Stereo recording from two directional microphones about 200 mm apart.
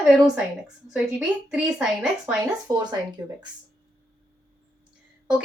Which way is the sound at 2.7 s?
15° right (ahead or behind).